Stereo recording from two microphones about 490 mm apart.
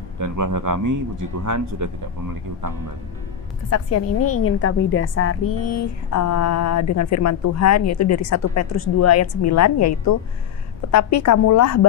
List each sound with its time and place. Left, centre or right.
0.2 s speech: right
3.7 s a woman's voice: left